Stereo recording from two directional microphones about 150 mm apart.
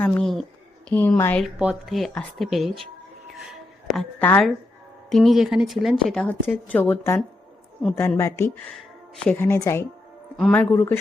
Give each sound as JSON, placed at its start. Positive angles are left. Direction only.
{"t": 0.0, "sound": "a woman's voice", "side_deg": 5}
{"t": 1.5, "sound": "a woman's voice", "side_deg": -5}
{"t": 3.3, "sound": "a sound", "side_deg": 0}
{"t": 4.2, "sound": "speech", "side_deg": 10}
{"t": 5.0, "sound": "a woman's voice", "side_deg": 0}